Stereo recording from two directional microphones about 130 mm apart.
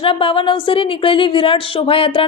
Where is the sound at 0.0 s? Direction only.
45° left (ahead or behind).